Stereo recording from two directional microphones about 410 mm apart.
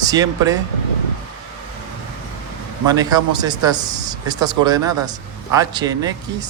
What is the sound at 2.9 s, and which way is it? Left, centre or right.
Speech, centre.